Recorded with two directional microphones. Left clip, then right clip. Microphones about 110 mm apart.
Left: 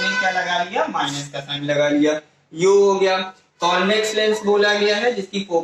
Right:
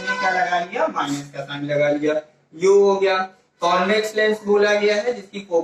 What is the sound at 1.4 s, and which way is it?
A man's voice, 30° left (ahead or behind).